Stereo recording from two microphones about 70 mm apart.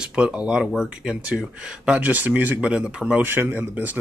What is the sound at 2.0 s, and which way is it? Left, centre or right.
Speech, right.